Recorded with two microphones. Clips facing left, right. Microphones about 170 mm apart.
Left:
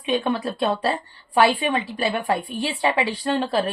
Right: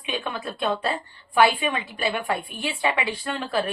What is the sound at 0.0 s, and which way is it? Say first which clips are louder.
A woman's voice: left 7 dB; 35° left (ahead or behind).